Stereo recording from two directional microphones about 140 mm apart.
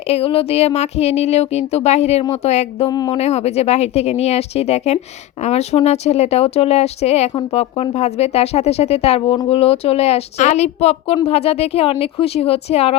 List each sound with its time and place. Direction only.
0.1 s speech: 45° left (ahead or behind)